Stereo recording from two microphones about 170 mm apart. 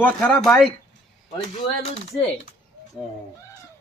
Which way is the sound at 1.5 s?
40° left (ahead or behind).